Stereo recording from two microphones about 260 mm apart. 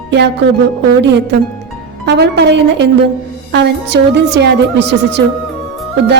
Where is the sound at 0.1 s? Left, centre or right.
Right.